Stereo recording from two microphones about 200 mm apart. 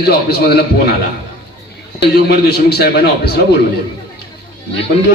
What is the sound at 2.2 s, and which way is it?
A man's voice, 55° left (ahead or behind).